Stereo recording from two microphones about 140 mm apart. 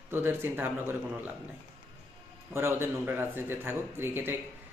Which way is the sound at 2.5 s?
15° right (ahead or behind).